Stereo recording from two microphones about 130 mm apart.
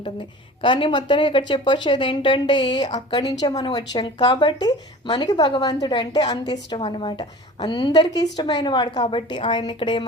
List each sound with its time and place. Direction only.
0.6 s a woman's voice: 40° left (ahead or behind)